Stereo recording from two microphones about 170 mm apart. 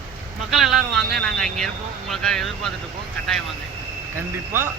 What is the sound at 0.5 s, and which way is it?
Speech, centre (ahead or behind).